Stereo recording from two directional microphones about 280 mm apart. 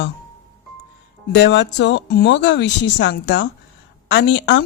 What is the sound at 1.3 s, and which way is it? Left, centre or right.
Speech, left.